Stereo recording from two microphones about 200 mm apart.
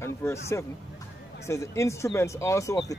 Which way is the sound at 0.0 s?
15° left (ahead or behind).